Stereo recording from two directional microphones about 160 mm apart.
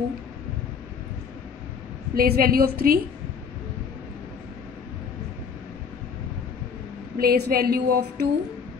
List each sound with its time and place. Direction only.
2.1 s a woman's voice: 70° right (ahead or behind)
7.2 s a woman's voice: 70° right (ahead or behind)